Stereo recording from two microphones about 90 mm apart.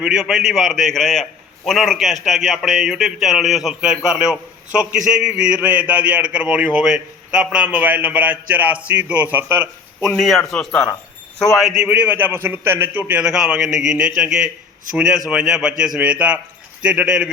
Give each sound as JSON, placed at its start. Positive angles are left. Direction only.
{"t": 0.0, "sound": "a man's voice", "side_deg": -10}
{"t": 10.2, "sound": "a man's voice", "side_deg": 0}
{"t": 11.5, "sound": "a man's voice", "side_deg": -5}
{"t": 11.9, "sound": "a man's voice", "side_deg": -20}
{"t": 13.2, "sound": "a man's voice", "side_deg": -10}